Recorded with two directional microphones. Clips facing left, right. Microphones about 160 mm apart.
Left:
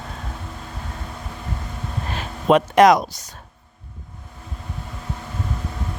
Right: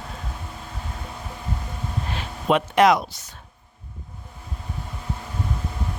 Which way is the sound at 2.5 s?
45° left (ahead or behind).